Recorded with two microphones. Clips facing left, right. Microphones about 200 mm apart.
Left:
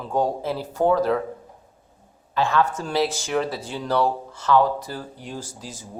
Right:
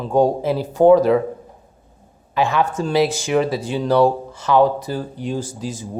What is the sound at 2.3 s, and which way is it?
Speech, 15° right (ahead or behind).